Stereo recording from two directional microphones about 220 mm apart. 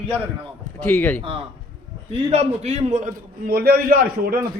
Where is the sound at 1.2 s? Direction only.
25° right (ahead or behind); by 4.3 s 40° right (ahead or behind).